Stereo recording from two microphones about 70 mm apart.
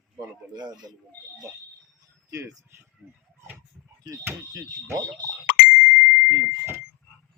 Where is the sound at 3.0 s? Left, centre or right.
Right.